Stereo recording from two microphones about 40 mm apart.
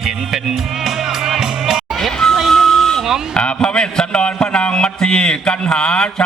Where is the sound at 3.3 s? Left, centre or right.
Left.